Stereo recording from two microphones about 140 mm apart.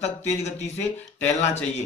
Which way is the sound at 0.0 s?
55° left (ahead or behind).